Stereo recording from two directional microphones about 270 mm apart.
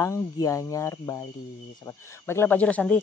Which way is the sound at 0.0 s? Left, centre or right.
Centre.